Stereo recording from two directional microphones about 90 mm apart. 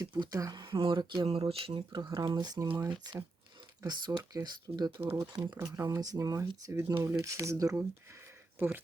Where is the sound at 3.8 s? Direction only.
50° right (ahead or behind).